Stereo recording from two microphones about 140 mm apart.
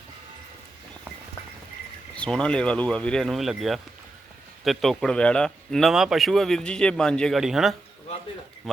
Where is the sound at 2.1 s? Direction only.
5° left (ahead or behind).